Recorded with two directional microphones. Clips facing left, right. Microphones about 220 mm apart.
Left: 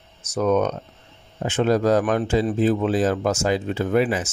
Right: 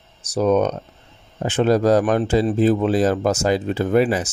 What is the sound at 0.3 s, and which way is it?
Speech, 30° right (ahead or behind).